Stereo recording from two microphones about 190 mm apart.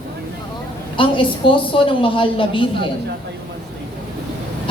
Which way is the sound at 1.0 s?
25° left (ahead or behind).